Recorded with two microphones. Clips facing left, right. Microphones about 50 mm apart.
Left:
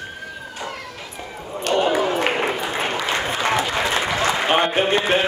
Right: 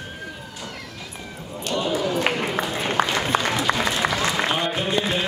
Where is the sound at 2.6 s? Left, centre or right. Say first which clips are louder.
Even; left.